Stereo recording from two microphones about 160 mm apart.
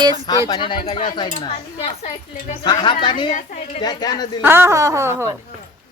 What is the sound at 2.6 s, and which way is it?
Speech, 25° left (ahead or behind).